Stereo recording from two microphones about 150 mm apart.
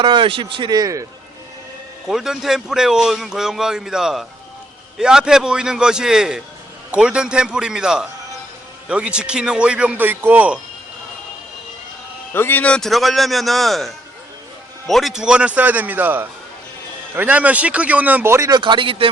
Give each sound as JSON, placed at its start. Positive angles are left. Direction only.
{"t": 0.0, "sound": "speech", "side_deg": -30}
{"t": 2.0, "sound": "a man's voice", "side_deg": -5}
{"t": 12.3, "sound": "a man's voice", "side_deg": 15}